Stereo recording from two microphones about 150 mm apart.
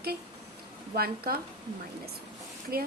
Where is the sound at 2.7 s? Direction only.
90° right.